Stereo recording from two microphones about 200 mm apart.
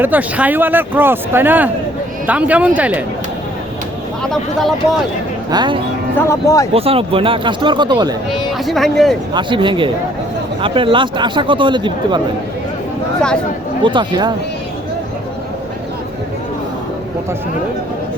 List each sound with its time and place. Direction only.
0.0 s speech: 10° right (ahead or behind)
4.2 s speech: centre (ahead or behind)
5.5 s speech: 20° right (ahead or behind)
6.2 s speech: 15° left (ahead or behind)
6.7 s speech: 30° right (ahead or behind)
8.5 s speech: centre (ahead or behind)
9.3 s speech: 25° right (ahead or behind)
13.8 s speech: 25° right (ahead or behind)